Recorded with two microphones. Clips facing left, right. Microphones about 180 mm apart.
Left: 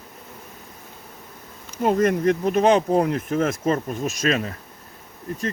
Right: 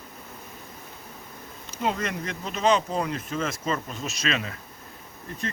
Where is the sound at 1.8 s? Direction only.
50° left (ahead or behind).